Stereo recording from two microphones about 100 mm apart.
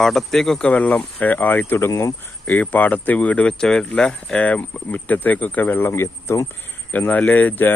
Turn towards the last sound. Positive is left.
turn(degrees=15)  # may be behind; listen again after turning